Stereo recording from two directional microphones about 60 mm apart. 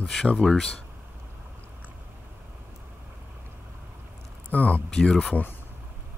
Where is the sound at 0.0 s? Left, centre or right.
Centre.